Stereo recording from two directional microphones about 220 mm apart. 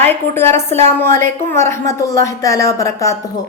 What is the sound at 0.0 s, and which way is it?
A woman's voice, 10° left (ahead or behind).